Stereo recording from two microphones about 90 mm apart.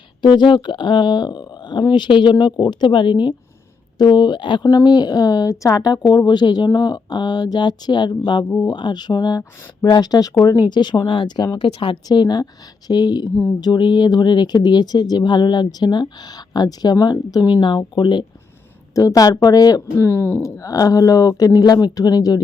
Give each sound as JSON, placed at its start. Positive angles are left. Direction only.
{"t": 0.2, "sound": "speech", "side_deg": 55}
{"t": 11.6, "sound": "speech", "side_deg": 80}
{"t": 12.0, "sound": "speech", "side_deg": 50}
{"t": 18.9, "sound": "speech", "side_deg": 40}
{"t": 20.1, "sound": "speech", "side_deg": 25}
{"t": 20.6, "sound": "speech", "side_deg": 40}